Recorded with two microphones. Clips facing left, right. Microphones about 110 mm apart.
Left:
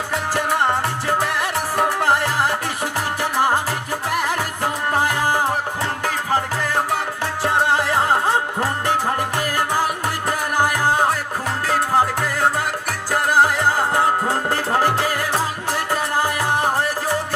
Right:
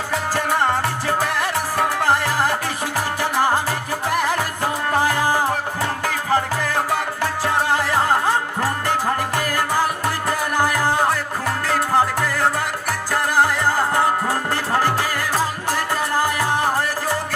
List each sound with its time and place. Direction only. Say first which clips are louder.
6.7 s music: even; 20° left (ahead or behind)
10.2 s music: left 1 dB; 20° left (ahead or behind)